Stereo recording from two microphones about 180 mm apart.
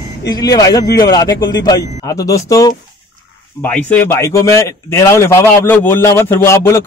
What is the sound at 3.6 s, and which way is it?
A man's voice, 10° left (ahead or behind).